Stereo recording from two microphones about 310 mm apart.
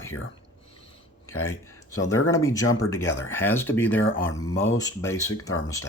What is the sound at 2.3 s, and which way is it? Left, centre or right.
Speech, centre.